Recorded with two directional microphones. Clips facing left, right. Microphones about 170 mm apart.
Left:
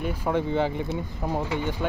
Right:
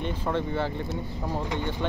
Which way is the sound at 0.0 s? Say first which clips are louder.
Left 2 dB; 10° left (ahead or behind).